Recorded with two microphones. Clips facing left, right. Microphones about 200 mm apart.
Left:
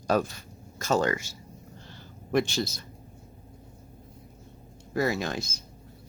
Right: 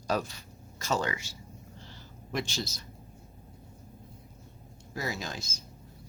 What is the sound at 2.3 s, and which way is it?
Speech, 55° left (ahead or behind).